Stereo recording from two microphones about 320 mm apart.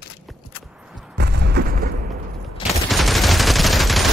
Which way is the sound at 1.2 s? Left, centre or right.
Right.